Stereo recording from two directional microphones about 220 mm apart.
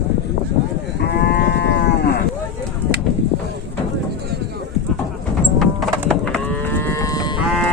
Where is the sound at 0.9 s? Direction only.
50° left (ahead or behind).